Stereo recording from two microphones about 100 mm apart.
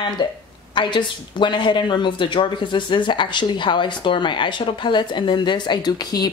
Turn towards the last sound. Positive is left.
turn(degrees=40)  # may be behind; listen again after turning